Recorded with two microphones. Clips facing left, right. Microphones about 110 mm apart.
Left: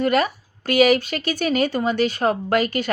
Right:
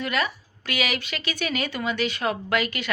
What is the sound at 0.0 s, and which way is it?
A woman's voice, 45° left (ahead or behind).